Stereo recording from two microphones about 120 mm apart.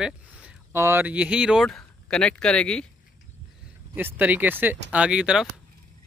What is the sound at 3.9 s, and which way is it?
Speech, 15° right (ahead or behind).